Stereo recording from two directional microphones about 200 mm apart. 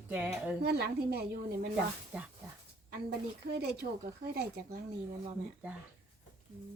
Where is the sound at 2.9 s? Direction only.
55° right (ahead or behind).